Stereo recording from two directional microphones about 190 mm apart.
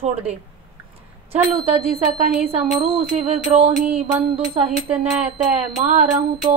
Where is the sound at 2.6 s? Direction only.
30° right (ahead or behind).